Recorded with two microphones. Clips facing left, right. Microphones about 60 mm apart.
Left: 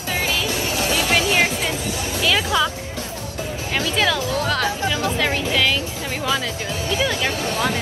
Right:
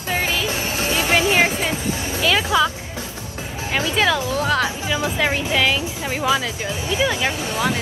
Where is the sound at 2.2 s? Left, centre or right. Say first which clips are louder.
Right 2 dB; centre.